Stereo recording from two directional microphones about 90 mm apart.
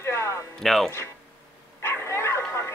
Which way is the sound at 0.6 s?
5° left (ahead or behind).